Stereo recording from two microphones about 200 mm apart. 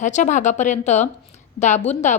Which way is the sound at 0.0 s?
35° left (ahead or behind).